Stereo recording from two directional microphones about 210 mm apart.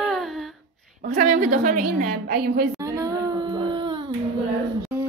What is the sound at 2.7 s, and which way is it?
Child singing, 15° right (ahead or behind).